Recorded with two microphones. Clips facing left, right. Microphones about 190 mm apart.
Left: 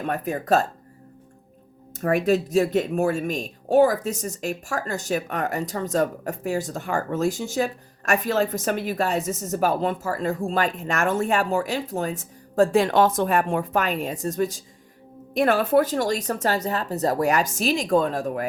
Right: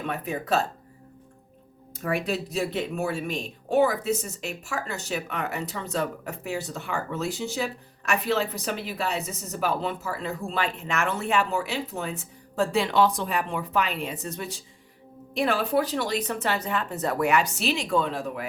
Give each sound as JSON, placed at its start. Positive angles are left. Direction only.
{"t": 0.0, "sound": "speech", "side_deg": 40}
{"t": 2.0, "sound": "speech", "side_deg": 45}